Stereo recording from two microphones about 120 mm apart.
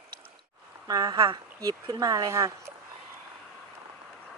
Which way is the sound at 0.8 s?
30° right (ahead or behind).